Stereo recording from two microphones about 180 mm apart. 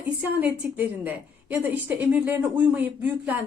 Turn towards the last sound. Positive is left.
turn(degrees=-10)  # may be behind; listen again after turning